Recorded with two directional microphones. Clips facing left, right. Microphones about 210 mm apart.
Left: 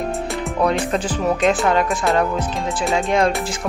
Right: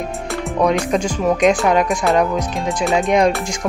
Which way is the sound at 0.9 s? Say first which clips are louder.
Right 3 dB; 10° right (ahead or behind).